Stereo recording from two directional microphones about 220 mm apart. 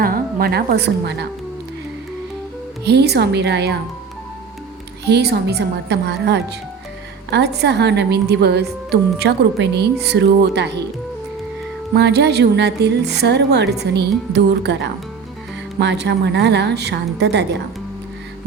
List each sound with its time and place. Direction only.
0.0 s a woman's voice: 40° right (ahead or behind)
2.8 s a woman's voice: 50° right (ahead or behind)
5.0 s a woman's voice: 50° right (ahead or behind)
11.9 s a woman's voice: 50° right (ahead or behind)